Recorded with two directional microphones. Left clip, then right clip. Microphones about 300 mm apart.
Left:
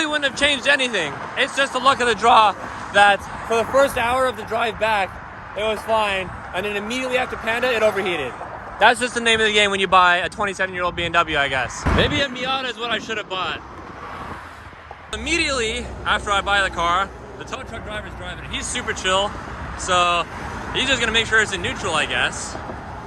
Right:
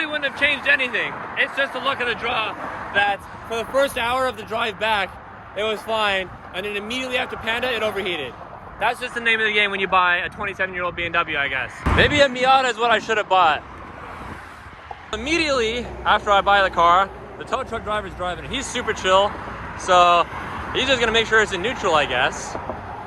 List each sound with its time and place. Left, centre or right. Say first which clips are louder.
0.0 s speech: left 2 dB; centre
8.8 s speech: left 7 dB; left
9.1 s speech: left 2 dB; centre
15.1 s speech: right 1 dB; centre